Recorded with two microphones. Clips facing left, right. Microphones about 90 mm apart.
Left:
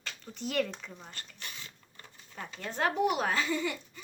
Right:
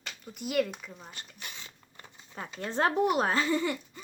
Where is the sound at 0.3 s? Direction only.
5° right (ahead or behind).